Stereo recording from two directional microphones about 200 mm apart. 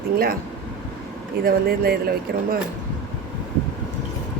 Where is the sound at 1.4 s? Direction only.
50° right (ahead or behind).